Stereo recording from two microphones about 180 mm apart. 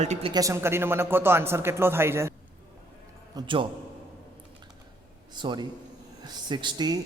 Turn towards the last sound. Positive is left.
turn(degrees=-25)  # may be behind; listen again after turning